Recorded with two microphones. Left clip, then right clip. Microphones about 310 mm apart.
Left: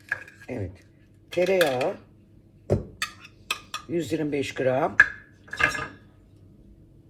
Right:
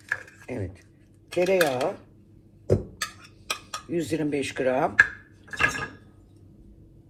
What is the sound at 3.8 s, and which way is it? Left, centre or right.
Speech, right.